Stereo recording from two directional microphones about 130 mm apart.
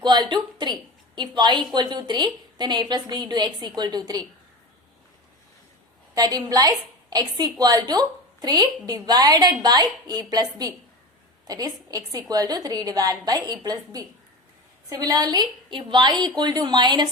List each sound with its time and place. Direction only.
0.0 s a woman's voice: 35° right (ahead or behind)
6.1 s a woman's voice: 30° right (ahead or behind)